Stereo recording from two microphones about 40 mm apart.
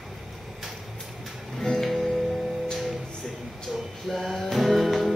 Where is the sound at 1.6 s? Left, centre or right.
Centre.